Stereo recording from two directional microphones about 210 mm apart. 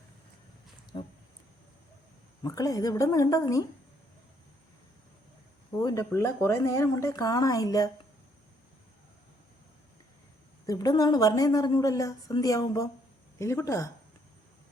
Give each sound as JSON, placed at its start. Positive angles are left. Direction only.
{"t": 0.9, "sound": "speech", "side_deg": 20}
{"t": 2.4, "sound": "a woman's voice", "side_deg": 15}
{"t": 5.8, "sound": "a woman's voice", "side_deg": 15}
{"t": 10.7, "sound": "a woman's voice", "side_deg": 15}